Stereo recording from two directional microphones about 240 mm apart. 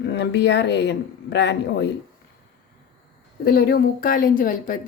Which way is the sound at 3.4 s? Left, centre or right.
Left.